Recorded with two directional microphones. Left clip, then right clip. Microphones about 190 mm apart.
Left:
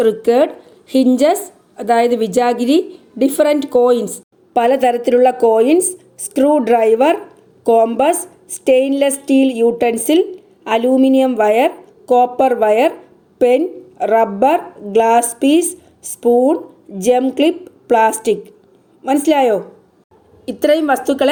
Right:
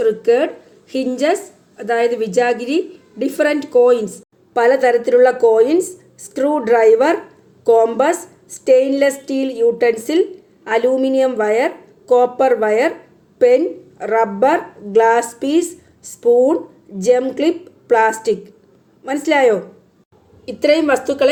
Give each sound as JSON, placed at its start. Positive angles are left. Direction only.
{"t": 0.0, "sound": "a woman's voice", "side_deg": 40}
{"t": 14.0, "sound": "a woman's voice", "side_deg": 40}